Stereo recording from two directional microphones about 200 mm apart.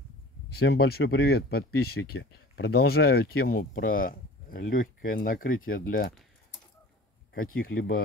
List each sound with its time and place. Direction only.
0.6 s speech: 55° left (ahead or behind)
7.5 s speech: 50° left (ahead or behind)